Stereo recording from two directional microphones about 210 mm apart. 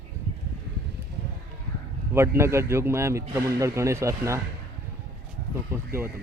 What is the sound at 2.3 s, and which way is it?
Speech, 10° right (ahead or behind).